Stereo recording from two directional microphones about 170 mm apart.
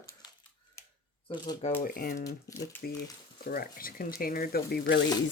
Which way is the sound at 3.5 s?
60° left (ahead or behind).